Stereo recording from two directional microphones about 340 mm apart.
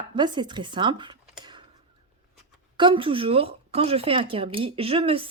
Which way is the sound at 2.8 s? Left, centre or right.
Centre.